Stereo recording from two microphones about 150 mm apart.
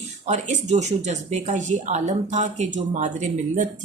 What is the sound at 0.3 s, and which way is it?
Speech, 50° right (ahead or behind).